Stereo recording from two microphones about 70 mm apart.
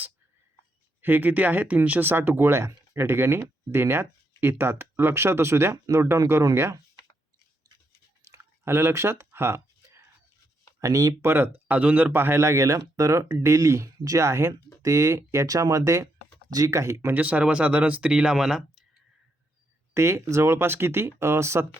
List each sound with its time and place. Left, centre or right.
1.0 s speech: right
8.2 s a sound: right
8.6 s speech: right
10.8 s speech: right
11.2 s speech: right
14.3 s speech: right
17.1 s speech: right; by 18.9 s centre
19.9 s speech: right